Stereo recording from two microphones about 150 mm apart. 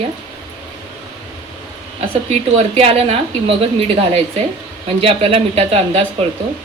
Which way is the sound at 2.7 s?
40° right (ahead or behind).